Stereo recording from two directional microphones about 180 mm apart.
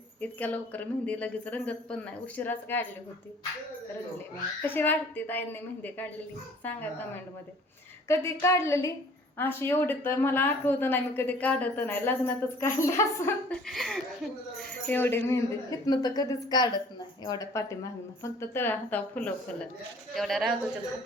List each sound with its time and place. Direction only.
0.2 s speech: 10° left (ahead or behind)
4.6 s speech: 10° left (ahead or behind)
8.0 s speech: 15° left (ahead or behind)
13.7 s a woman's voice: centre (ahead or behind)